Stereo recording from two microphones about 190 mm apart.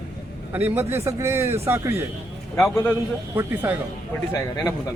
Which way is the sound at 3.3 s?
10° right (ahead or behind).